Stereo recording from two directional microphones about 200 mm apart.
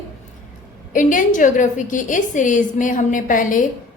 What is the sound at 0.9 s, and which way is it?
A woman's voice, 40° left (ahead or behind).